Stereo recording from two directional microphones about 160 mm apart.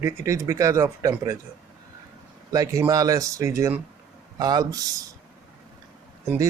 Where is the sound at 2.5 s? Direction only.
20° right (ahead or behind).